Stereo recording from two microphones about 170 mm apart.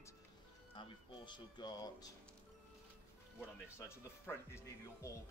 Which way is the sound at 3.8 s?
15° left (ahead or behind).